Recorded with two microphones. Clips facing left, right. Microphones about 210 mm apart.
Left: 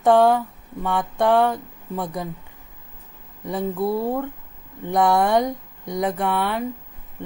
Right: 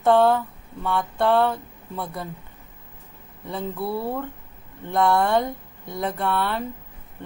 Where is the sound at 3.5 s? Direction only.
15° left (ahead or behind).